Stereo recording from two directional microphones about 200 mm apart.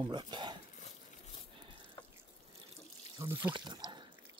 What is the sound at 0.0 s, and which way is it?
Speech, 20° right (ahead or behind).